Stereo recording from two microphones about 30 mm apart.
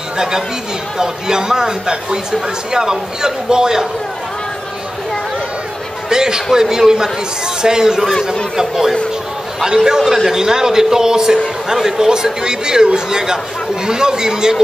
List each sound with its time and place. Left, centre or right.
0.9 s a man's voice: right
6.0 s a man's voice: right